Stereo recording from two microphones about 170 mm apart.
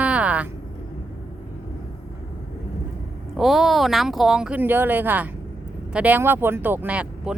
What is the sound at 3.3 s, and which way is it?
Speech, centre (ahead or behind).